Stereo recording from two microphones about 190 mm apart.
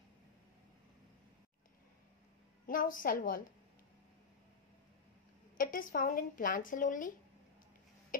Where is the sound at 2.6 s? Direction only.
45° left (ahead or behind).